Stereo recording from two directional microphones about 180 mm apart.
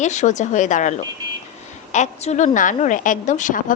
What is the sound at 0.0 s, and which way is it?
A woman's voice, 40° left (ahead or behind).